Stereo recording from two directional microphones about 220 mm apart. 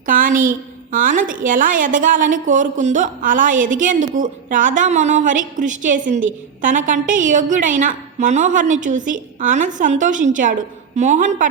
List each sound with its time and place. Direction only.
0.0 s a woman's voice: 40° right (ahead or behind)